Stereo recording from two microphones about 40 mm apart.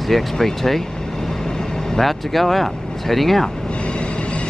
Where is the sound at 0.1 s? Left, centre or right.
Centre.